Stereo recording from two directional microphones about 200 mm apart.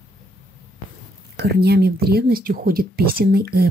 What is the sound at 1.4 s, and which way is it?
Speech, 55° right (ahead or behind).